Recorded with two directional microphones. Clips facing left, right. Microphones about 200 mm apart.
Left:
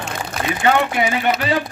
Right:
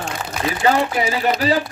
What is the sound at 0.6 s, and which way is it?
Speech, 35° right (ahead or behind).